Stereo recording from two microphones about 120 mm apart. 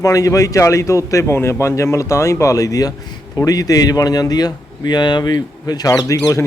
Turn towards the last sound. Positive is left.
turn(degrees=30)  # may be behind; listen again after turning